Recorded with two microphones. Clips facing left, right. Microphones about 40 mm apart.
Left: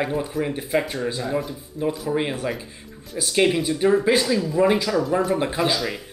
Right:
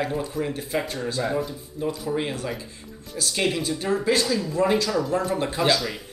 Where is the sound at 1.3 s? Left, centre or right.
Centre.